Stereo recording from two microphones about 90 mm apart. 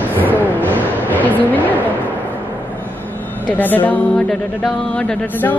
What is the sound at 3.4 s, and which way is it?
Music, 20° left (ahead or behind).